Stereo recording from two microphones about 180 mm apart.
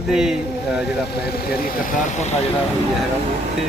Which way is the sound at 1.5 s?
55° left (ahead or behind).